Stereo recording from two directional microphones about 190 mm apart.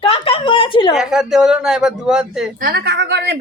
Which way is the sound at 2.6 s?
55° right (ahead or behind).